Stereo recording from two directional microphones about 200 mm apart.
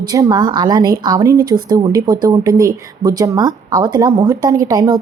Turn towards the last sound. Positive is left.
turn(degrees=-20)  # may be behind; listen again after turning